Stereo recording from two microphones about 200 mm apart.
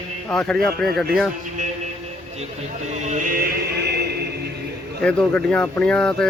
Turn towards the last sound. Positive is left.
turn(degrees=5)  # may be behind; listen again after turning